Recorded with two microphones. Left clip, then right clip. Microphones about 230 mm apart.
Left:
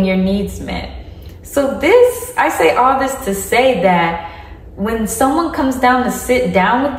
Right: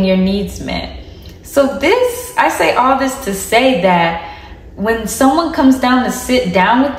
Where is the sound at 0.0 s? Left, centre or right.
Centre.